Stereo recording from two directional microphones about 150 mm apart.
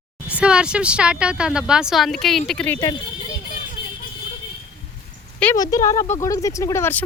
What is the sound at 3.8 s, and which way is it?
Vehicle, 30° left (ahead or behind).